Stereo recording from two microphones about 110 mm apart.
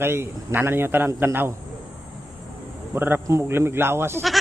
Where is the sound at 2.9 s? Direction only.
20° right (ahead or behind).